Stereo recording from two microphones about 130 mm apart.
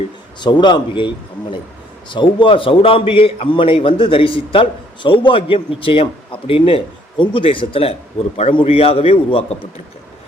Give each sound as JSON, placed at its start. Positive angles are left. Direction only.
{"t": 0.3, "sound": "a man's voice", "side_deg": 35}